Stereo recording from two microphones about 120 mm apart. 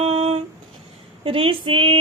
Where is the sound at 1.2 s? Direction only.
50° right (ahead or behind).